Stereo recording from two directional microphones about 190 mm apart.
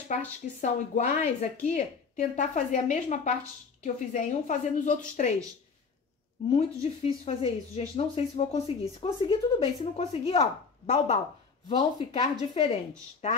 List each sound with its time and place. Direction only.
0.6 s speech: 40° left (ahead or behind)
6.5 s speech: 35° left (ahead or behind)